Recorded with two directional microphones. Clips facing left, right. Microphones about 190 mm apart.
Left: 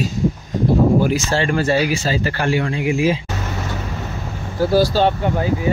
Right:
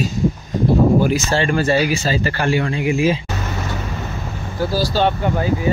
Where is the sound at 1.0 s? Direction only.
5° left (ahead or behind).